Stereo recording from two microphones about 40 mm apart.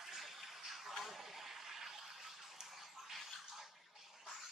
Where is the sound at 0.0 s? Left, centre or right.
Centre.